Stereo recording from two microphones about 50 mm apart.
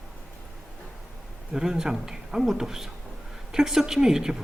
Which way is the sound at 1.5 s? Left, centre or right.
Centre.